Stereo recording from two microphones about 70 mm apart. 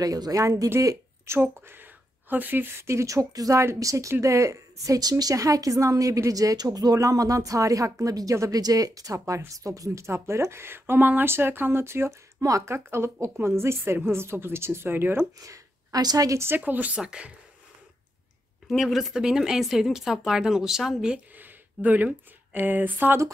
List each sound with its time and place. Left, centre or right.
0.0 s a woman's voice: right
15.4 s a woman's voice: right
16.3 s speech: right; by 17.3 s centre
18.7 s speech: centre
21.4 s speech: right